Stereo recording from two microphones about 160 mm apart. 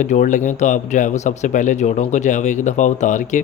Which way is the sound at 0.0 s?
50° left (ahead or behind).